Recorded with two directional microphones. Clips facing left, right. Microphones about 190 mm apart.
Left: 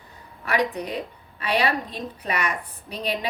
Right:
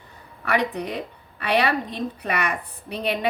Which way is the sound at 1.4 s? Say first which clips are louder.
Right 2 dB; 60° right (ahead or behind).